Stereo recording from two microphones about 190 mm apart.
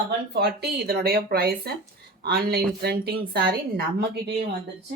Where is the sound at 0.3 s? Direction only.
55° right (ahead or behind).